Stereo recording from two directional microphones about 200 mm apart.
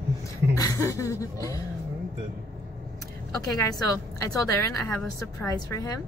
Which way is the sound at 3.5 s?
15° left (ahead or behind).